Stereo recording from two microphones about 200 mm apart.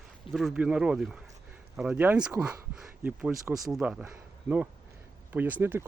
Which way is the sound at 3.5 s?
15° right (ahead or behind).